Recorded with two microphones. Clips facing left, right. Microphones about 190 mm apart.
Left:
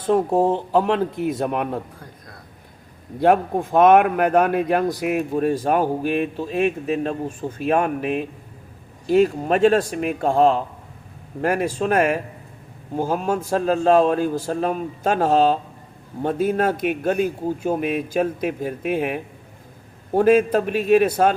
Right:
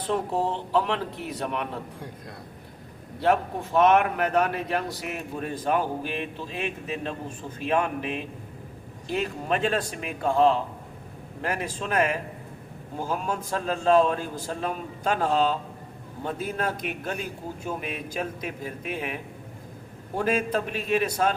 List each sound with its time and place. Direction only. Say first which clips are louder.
0.0 s speech: left 8 dB; 45° left (ahead or behind)
3.2 s speech: left 7 dB; 50° left (ahead or behind)